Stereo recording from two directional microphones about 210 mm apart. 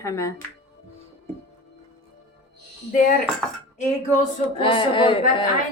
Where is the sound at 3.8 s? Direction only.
35° left (ahead or behind).